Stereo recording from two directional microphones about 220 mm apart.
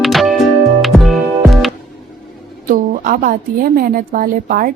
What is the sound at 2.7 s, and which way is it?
A woman's voice, 40° right (ahead or behind).